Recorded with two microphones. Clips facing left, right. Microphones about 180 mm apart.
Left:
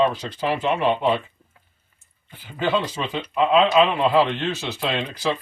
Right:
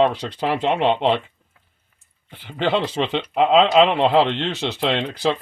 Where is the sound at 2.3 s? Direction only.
70° right (ahead or behind).